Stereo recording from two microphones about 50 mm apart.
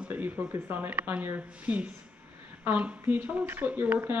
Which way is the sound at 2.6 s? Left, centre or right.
Right.